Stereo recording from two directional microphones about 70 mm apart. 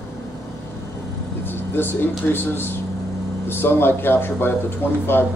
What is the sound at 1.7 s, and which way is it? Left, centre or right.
Speech, left.